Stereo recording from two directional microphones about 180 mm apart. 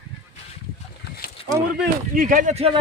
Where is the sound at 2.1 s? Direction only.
50° right (ahead or behind).